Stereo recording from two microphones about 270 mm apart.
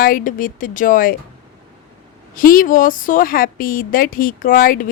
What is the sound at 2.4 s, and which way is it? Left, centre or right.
A woman's voice, left.